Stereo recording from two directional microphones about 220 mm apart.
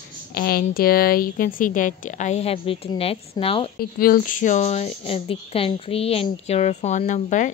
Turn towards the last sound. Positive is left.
turn(degrees=35)  # may be behind; listen again after turning